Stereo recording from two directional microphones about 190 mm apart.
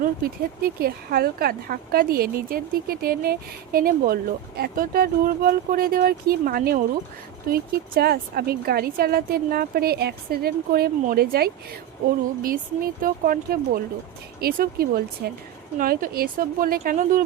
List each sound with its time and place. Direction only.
0.0 s speech: 50° right (ahead or behind)